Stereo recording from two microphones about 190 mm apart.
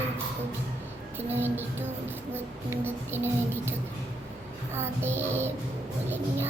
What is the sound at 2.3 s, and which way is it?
Speech, 10° right (ahead or behind).